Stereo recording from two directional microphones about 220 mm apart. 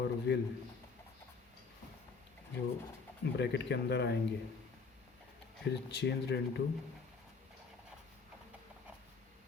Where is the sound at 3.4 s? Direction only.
50° left (ahead or behind).